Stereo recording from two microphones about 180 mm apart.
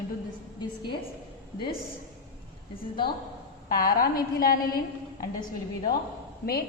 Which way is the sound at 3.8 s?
55° left (ahead or behind).